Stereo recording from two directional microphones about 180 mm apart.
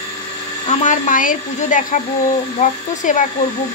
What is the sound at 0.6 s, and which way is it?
Speech, 45° left (ahead or behind).